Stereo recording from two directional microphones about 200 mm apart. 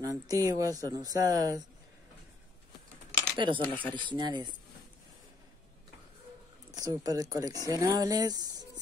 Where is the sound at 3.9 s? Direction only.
25° right (ahead or behind).